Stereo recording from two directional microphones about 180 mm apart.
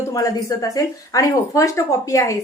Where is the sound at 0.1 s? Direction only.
20° left (ahead or behind).